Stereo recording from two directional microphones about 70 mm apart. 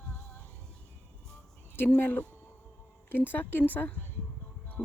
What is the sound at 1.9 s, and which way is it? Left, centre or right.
A woman's voice, left.